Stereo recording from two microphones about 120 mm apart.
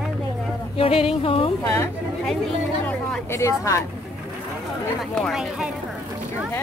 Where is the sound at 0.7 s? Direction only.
50° left (ahead or behind).